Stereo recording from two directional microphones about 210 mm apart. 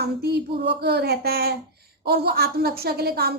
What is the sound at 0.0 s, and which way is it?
A woman's voice, 50° right (ahead or behind).